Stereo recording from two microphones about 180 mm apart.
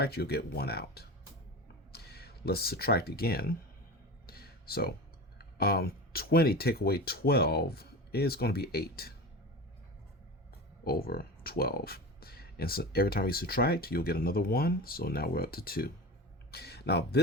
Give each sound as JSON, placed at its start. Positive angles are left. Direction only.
{"t": 0.0, "sound": "speech", "side_deg": 60}
{"t": 1.6, "sound": "a sound", "side_deg": 60}
{"t": 5.4, "sound": "speech", "side_deg": 60}
{"t": 10.8, "sound": "speech", "side_deg": 55}